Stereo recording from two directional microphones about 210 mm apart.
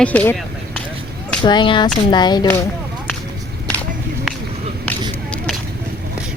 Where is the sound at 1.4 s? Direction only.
20° left (ahead or behind).